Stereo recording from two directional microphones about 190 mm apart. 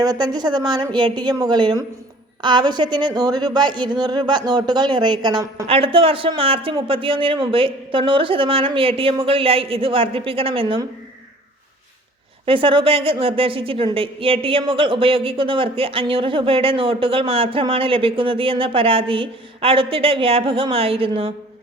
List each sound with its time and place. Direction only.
0.0 s a woman's voice: 20° right (ahead or behind)
12.5 s a woman's voice: 30° right (ahead or behind)